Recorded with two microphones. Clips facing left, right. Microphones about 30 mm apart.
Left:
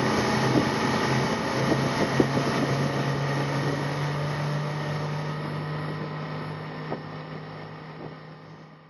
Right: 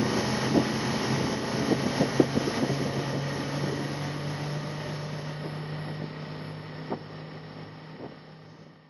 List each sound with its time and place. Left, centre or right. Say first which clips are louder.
0.0 s vehicle: left 3 dB; centre